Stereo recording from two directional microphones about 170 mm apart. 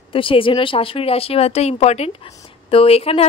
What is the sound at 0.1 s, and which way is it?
Speech, 30° left (ahead or behind).